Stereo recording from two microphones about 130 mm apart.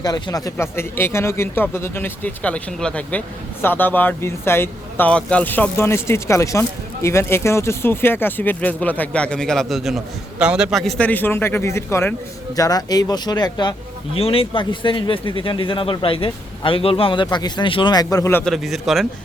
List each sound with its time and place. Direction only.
0.0 s speech: 30° left (ahead or behind)
0.5 s speech: 20° left (ahead or behind); by 13.7 s 35° left (ahead or behind)
14.2 s speech: 45° left (ahead or behind); by 18.4 s 20° left (ahead or behind)
18.4 s a man's voice: centre (ahead or behind)